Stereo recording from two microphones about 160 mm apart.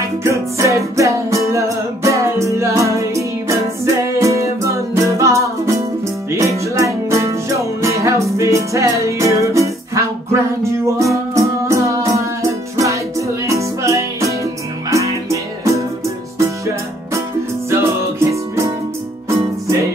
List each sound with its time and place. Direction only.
0.2 s music: 20° right (ahead or behind)
19.2 s music: 20° right (ahead or behind)